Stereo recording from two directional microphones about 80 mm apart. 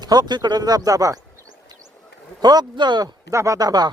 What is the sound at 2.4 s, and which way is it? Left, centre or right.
Speech, right.